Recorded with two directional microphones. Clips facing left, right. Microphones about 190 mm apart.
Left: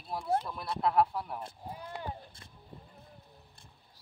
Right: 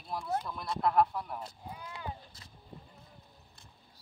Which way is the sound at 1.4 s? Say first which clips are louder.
Left 2 dB; 55° left (ahead or behind).